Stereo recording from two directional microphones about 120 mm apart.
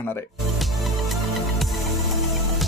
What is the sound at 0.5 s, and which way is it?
Music, centre (ahead or behind).